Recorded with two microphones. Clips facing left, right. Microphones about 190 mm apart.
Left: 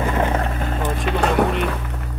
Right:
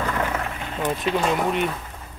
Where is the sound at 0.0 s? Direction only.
25° left (ahead or behind).